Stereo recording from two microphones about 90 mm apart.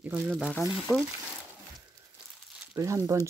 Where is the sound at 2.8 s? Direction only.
35° right (ahead or behind).